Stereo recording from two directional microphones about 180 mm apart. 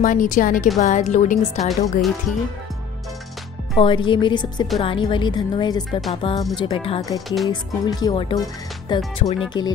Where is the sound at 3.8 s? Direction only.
30° left (ahead or behind).